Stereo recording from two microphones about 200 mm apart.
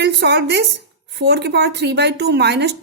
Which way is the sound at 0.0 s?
55° right (ahead or behind).